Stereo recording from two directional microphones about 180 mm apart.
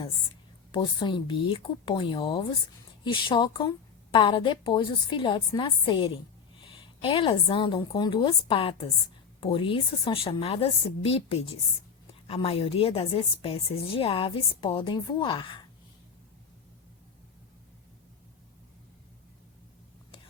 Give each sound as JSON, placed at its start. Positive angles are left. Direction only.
{"t": 0.7, "sound": "a woman's voice", "side_deg": 25}